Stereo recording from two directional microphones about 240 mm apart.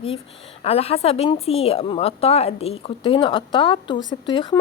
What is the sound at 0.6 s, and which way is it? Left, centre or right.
A woman's voice, left.